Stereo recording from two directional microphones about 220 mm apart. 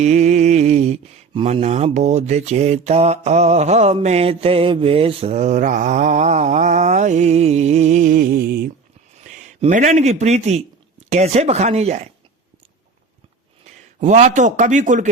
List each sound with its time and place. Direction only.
0.0 s mantra: 30° right (ahead or behind)
9.2 s speech: 35° right (ahead or behind)
14.0 s mantra: 30° right (ahead or behind)